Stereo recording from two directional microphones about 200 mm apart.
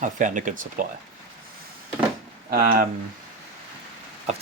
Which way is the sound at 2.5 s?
45° right (ahead or behind).